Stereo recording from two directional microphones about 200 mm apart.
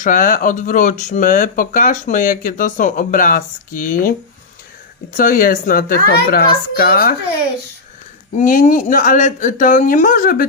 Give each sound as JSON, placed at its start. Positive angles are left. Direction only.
{"t": 0.0, "sound": "speech", "side_deg": 40}
{"t": 5.1, "sound": "a woman's voice", "side_deg": 45}
{"t": 8.4, "sound": "speech", "side_deg": 40}